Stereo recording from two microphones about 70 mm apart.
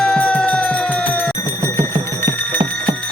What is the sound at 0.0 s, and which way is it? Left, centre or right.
Music, centre.